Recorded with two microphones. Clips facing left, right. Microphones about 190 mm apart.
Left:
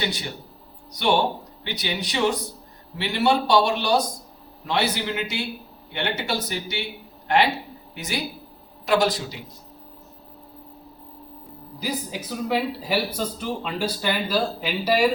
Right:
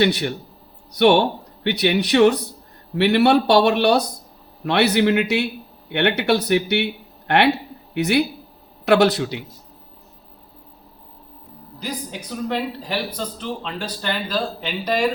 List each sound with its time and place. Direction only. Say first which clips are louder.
0.0 s speech: right 10 dB; 65° right (ahead or behind)
11.8 s a man's voice: left 1 dB; 5° left (ahead or behind)